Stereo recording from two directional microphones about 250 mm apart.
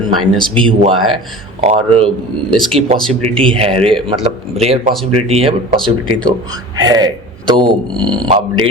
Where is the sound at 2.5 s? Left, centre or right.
Centre.